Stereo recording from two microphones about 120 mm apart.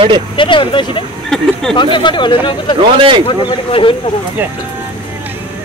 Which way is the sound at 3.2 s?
45° left (ahead or behind).